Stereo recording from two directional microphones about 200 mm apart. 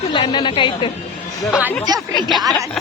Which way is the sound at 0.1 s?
25° left (ahead or behind).